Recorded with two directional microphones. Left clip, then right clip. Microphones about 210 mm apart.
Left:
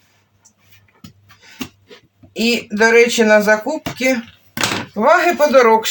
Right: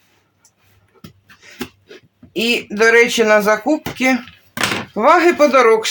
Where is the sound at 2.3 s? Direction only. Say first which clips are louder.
Even; 50° right (ahead or behind).